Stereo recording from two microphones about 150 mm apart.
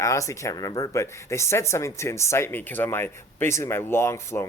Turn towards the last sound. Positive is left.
turn(degrees=20)  # may be behind; listen again after turning